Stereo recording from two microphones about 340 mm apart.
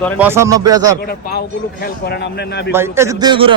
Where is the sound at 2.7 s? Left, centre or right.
Centre.